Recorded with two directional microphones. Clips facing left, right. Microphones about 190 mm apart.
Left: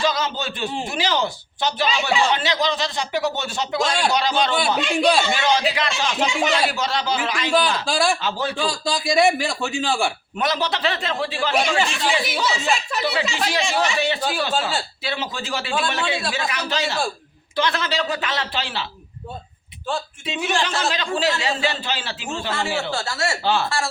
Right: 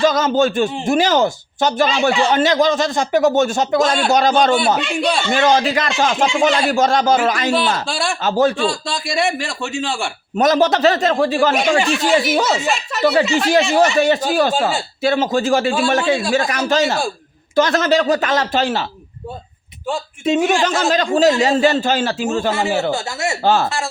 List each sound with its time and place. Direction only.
0.0 s speech: 50° right (ahead or behind)
4.8 s speech: centre (ahead or behind)
5.3 s speech: 50° right (ahead or behind)
7.9 s speech: centre (ahead or behind)
8.2 s speech: 45° right (ahead or behind)
8.5 s speech: centre (ahead or behind)
10.3 s speech: 45° right (ahead or behind)
12.6 s speech: centre (ahead or behind)
13.0 s speech: 45° right (ahead or behind)
20.2 s speech: 45° right (ahead or behind)
22.9 s speech: 20° right (ahead or behind)
23.4 s speech: 45° right (ahead or behind)
23.6 s speech: 20° right (ahead or behind)